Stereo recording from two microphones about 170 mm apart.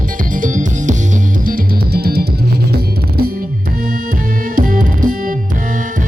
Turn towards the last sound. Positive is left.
turn(degrees=-55)  # may be behind; listen again after turning